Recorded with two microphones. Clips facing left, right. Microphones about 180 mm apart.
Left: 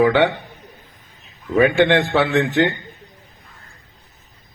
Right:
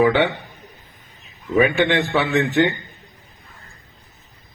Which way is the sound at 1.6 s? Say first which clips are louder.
Left 7 dB; 60° left (ahead or behind).